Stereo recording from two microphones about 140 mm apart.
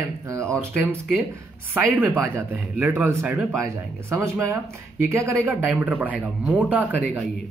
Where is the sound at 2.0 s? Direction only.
15° right (ahead or behind).